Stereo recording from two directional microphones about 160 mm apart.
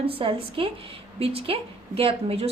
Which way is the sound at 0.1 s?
35° right (ahead or behind).